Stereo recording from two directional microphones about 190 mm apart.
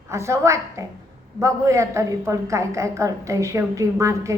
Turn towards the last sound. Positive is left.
turn(degrees=-15)  # may be behind; listen again after turning